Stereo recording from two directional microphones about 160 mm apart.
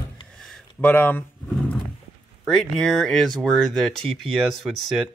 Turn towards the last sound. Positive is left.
turn(degrees=0)  # may be behind; listen again after turning